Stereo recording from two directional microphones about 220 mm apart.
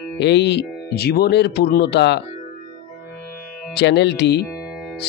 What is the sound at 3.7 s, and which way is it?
Speech, 50° left (ahead or behind).